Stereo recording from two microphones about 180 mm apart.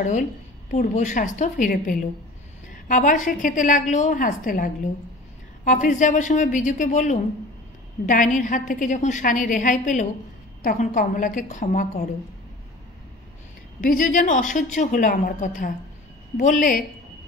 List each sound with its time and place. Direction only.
0.7 s a woman's voice: 45° left (ahead or behind)
13.7 s a woman's voice: 50° left (ahead or behind)